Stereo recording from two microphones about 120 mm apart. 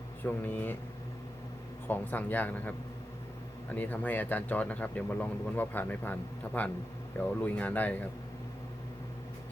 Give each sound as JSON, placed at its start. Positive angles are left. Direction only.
{"t": 0.3, "sound": "speech", "side_deg": 15}
{"t": 1.9, "sound": "speech", "side_deg": 15}